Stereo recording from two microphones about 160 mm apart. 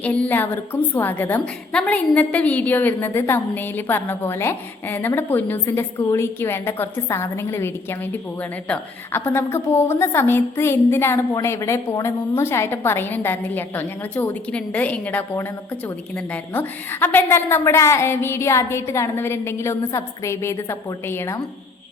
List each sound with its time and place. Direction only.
0.0 s a woman's voice: 10° left (ahead or behind)